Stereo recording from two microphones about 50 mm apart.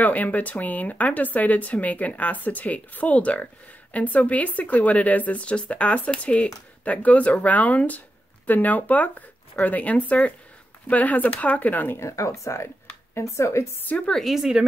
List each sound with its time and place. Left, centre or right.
0.0 s speech: left
12.0 s speech: left
13.9 s speech: left
14.3 s a woman's voice: centre